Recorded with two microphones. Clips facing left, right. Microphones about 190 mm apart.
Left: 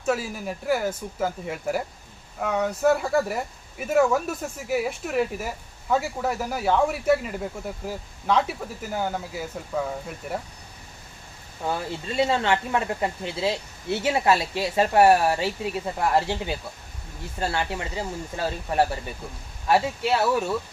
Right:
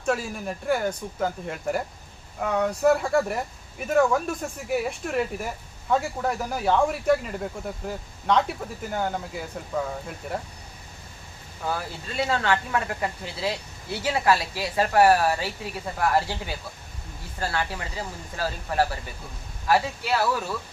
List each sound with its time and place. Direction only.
0.0 s speech: 5° left (ahead or behind)
11.6 s speech: 25° left (ahead or behind)